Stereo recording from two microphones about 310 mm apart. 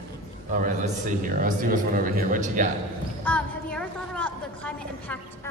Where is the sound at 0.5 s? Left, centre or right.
Right.